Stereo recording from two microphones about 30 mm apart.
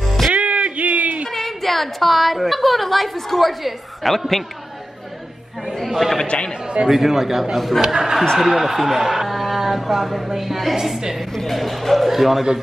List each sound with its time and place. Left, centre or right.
0.3 s a sound: right
1.3 s a woman's voice: centre
5.9 s chatter: centre
6.2 s a man's voice: left
6.9 s a man's voice: centre
7.5 s speech: centre
7.8 s a man's voice: centre
10.8 s a man's voice: centre
11.5 s speech: centre